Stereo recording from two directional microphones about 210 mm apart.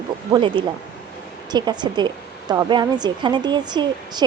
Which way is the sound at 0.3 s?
20° right (ahead or behind).